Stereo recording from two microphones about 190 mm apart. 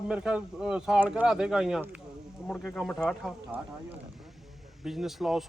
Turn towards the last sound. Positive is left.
turn(degrees=0)  # may be behind; listen again after turning